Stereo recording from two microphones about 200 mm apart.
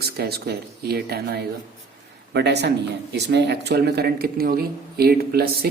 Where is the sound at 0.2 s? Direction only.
50° right (ahead or behind).